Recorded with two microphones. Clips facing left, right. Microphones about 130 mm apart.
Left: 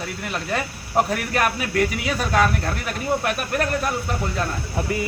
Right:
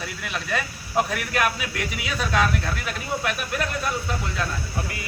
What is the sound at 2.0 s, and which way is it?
Speech, 50° left (ahead or behind).